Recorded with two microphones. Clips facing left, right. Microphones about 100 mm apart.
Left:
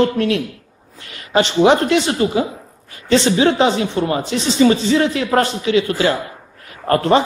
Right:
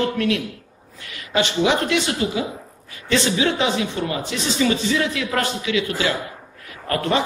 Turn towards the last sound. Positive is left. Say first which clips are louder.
# left 7 dB
turn(degrees=40)  # may be behind; listen again after turning